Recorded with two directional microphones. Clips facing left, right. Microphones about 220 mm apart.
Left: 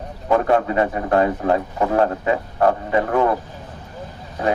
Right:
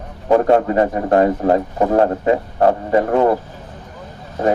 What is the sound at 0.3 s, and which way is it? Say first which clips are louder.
Speech: right 4 dB; 30° right (ahead or behind).